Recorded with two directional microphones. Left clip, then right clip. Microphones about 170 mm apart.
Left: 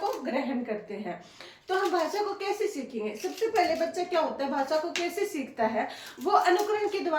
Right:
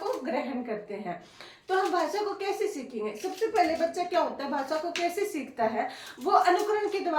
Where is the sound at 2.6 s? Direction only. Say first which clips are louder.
Even; 15° right (ahead or behind).